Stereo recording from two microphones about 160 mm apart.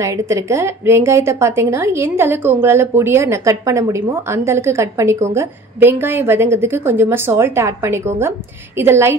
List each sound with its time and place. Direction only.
0.0 s a woman's voice: 20° right (ahead or behind)